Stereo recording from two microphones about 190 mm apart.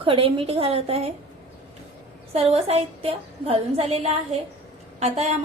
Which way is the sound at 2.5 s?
30° right (ahead or behind).